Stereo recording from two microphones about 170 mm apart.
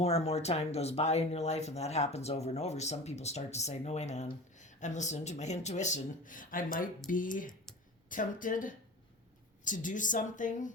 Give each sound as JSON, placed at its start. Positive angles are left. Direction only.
{"t": 0.0, "sound": "speech", "side_deg": 40}